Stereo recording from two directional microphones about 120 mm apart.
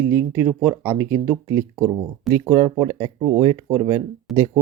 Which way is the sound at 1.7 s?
15° right (ahead or behind).